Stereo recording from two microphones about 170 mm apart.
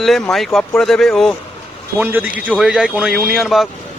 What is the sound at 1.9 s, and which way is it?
Speech, 10° right (ahead or behind).